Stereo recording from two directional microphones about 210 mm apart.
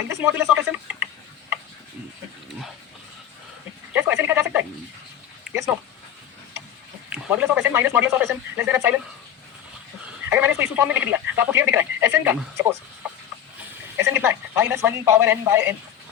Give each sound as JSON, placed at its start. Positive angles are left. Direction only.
{"t": 0.1, "sound": "speech", "side_deg": -10}
{"t": 3.9, "sound": "speech", "side_deg": -10}
{"t": 5.5, "sound": "a sound", "side_deg": -5}
{"t": 7.1, "sound": "speech", "side_deg": -5}
{"t": 10.2, "sound": "speech", "side_deg": -10}
{"t": 13.0, "sound": "chicken", "side_deg": -5}
{"t": 13.9, "sound": "speech", "side_deg": -10}